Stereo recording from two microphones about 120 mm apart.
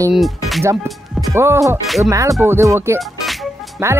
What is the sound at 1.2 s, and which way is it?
Speech, 20° right (ahead or behind).